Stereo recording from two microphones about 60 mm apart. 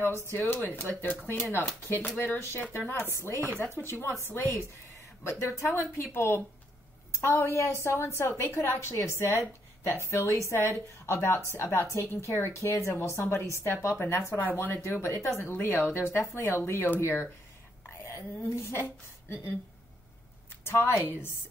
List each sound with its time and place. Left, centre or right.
0.0 s speech: left
3.4 s speech: left
5.2 s speech: left
14.4 s speech: left
14.7 s speech: left
16.9 s speech: left
18.4 s speech: left
20.6 s a woman's voice: left